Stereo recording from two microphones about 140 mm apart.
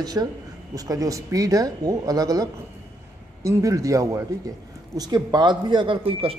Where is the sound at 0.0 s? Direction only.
30° right (ahead or behind).